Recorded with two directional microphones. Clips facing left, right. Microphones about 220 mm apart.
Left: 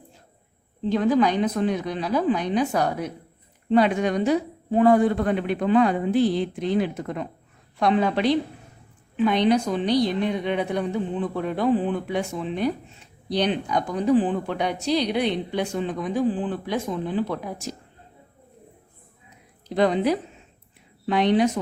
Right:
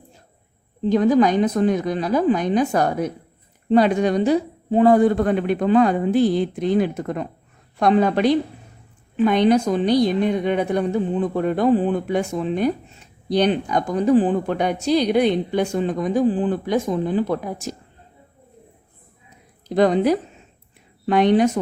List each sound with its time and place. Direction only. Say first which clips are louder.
0.9 s a woman's voice: right 4 dB; 45° right (ahead or behind)
19.7 s a woman's voice: right 4 dB; 45° right (ahead or behind)